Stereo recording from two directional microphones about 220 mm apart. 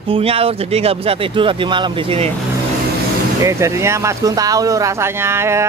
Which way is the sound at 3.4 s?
15° right (ahead or behind).